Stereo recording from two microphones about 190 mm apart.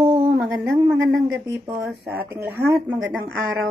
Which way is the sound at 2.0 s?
10° right (ahead or behind).